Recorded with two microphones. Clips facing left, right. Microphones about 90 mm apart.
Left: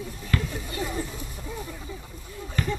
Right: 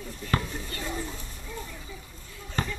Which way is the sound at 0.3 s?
30° right (ahead or behind).